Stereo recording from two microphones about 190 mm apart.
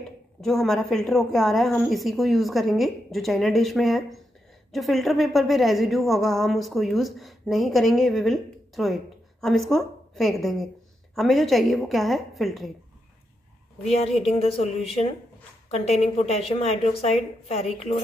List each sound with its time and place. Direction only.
0.4 s a woman's voice: centre (ahead or behind)
13.8 s a woman's voice: 30° left (ahead or behind)
15.7 s a woman's voice: 35° left (ahead or behind)